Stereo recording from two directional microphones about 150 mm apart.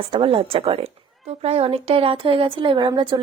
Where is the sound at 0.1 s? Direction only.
35° right (ahead or behind).